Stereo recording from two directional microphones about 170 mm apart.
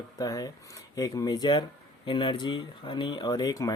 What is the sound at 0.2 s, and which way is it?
Speech, 20° left (ahead or behind).